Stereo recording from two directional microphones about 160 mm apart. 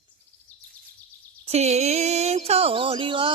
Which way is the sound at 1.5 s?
40° right (ahead or behind).